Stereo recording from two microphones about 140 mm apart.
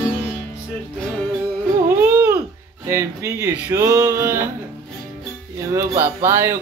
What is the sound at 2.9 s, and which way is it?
Speech, 20° right (ahead or behind).